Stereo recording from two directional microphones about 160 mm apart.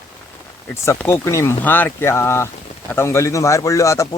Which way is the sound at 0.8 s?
15° left (ahead or behind).